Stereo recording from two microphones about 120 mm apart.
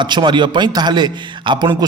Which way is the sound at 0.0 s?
40° right (ahead or behind).